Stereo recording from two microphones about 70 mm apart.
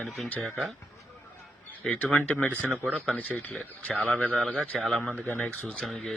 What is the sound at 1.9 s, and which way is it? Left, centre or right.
Speech, left.